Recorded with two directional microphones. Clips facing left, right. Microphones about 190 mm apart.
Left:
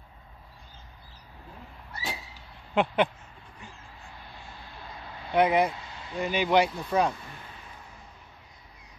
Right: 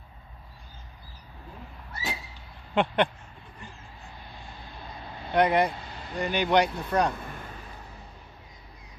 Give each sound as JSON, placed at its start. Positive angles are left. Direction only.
{"t": 2.7, "sound": "speech", "side_deg": 0}
{"t": 5.3, "sound": "speech", "side_deg": 0}
{"t": 5.8, "sound": "vehicle", "side_deg": -40}
{"t": 6.1, "sound": "speech", "side_deg": 5}
{"t": 7.2, "sound": "a sound", "side_deg": -50}